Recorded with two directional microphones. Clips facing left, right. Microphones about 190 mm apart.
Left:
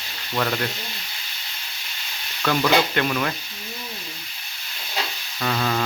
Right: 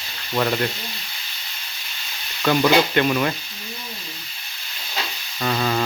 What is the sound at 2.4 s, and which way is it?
Stir, 10° right (ahead or behind).